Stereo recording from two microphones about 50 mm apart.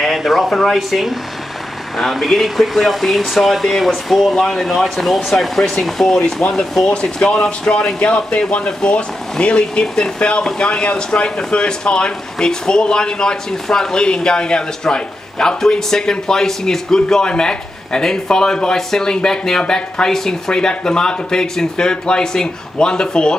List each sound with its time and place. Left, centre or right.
0.0 s speech: centre